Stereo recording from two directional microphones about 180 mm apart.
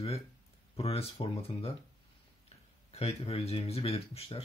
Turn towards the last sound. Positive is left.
turn(degrees=35)  # may be behind; listen again after turning